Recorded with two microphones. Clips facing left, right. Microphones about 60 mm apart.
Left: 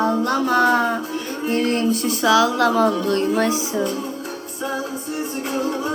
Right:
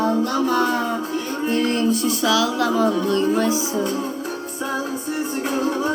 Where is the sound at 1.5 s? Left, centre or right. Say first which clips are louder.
Left 1 dB; left.